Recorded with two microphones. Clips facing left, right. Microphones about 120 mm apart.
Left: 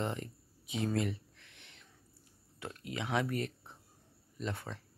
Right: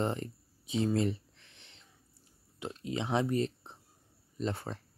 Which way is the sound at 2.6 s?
25° right (ahead or behind).